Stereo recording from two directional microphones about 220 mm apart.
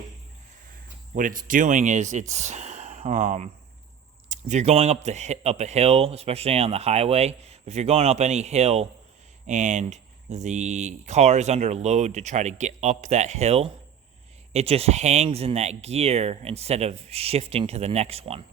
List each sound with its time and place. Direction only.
1.1 s a man's voice: 35° right (ahead or behind)